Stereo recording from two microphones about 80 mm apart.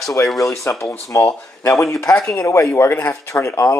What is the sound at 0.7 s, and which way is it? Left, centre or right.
Speech, left.